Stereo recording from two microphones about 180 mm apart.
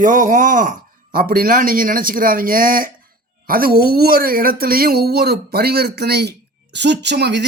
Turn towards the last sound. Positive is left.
turn(degrees=-70)  # may be behind; listen again after turning